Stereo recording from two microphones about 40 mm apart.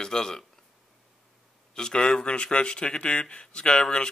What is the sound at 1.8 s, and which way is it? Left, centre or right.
Speech, centre.